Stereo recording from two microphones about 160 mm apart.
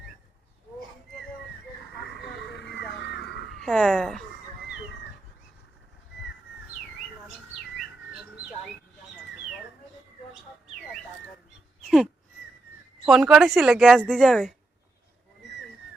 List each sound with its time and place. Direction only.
2.0 s a sound: 90° left
3.6 s a woman's voice: 5° left (ahead or behind)
13.1 s a woman's voice: 5° right (ahead or behind)